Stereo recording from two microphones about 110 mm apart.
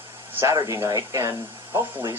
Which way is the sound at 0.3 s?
25° right (ahead or behind).